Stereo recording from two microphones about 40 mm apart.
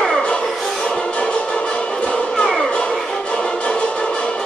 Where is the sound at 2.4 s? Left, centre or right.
Centre.